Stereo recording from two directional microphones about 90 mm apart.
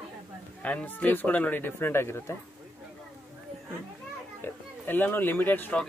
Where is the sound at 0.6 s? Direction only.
15° left (ahead or behind).